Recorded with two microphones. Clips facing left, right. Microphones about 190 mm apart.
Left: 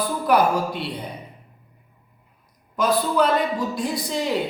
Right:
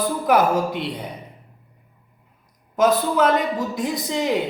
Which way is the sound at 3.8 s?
20° right (ahead or behind).